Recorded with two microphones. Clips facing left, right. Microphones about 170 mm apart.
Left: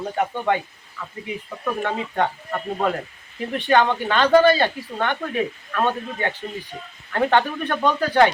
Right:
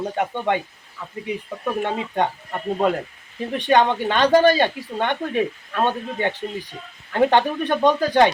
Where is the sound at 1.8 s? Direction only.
20° right (ahead or behind).